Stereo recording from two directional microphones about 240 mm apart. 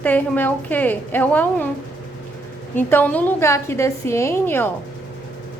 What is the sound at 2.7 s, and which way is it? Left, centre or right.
A woman's voice, centre.